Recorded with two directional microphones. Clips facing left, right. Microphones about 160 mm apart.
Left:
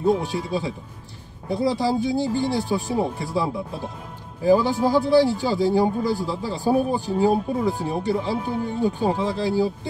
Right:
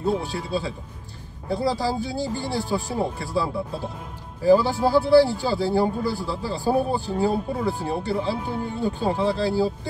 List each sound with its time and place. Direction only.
0.0 s speech: 15° left (ahead or behind)